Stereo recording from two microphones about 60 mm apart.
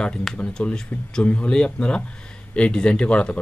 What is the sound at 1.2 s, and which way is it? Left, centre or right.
Speech, left.